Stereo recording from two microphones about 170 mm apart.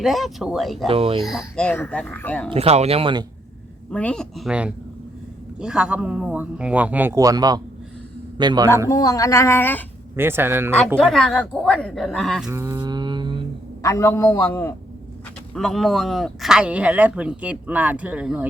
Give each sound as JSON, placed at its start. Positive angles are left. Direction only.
{"t": 0.0, "sound": "speech", "side_deg": 0}
{"t": 0.9, "sound": "speech", "side_deg": -35}
{"t": 1.2, "sound": "speech", "side_deg": 0}
{"t": 2.5, "sound": "speech", "side_deg": -35}
{"t": 3.9, "sound": "a man's voice", "side_deg": 5}
{"t": 8.9, "sound": "speech", "side_deg": 20}
{"t": 10.2, "sound": "speech", "side_deg": -15}
{"t": 10.9, "sound": "speech", "side_deg": 0}
{"t": 12.5, "sound": "mantra", "side_deg": -15}
{"t": 13.8, "sound": "speech", "side_deg": 15}
{"t": 15.5, "sound": "speech", "side_deg": 0}